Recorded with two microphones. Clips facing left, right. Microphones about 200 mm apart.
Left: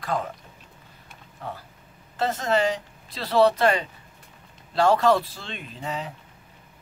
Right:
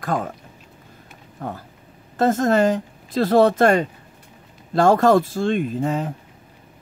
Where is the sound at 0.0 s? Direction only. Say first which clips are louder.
Right 4 dB; 50° right (ahead or behind).